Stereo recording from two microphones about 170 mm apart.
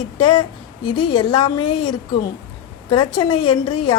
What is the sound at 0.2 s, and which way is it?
A woman's voice, 25° left (ahead or behind).